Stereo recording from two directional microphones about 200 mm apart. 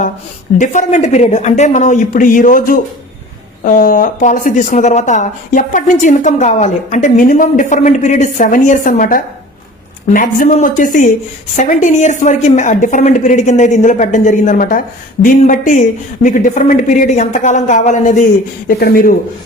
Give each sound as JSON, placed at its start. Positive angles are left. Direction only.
{"t": 0.6, "sound": "a woman's voice", "side_deg": 40}
{"t": 18.8, "sound": "speech", "side_deg": 50}